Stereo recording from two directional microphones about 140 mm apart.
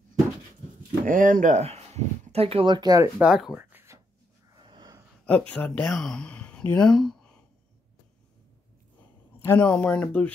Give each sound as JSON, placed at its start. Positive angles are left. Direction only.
{"t": 1.0, "sound": "speech", "side_deg": -75}
{"t": 3.2, "sound": "speech", "side_deg": -5}
{"t": 3.7, "sound": "a sound", "side_deg": -20}
{"t": 4.6, "sound": "wheeze", "side_deg": -35}
{"t": 5.5, "sound": "speech", "side_deg": 10}
{"t": 9.4, "sound": "speech", "side_deg": 15}